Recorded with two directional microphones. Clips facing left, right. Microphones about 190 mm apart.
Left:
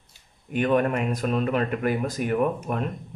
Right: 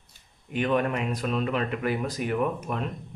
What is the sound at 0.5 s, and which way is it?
Speech, 45° left (ahead or behind).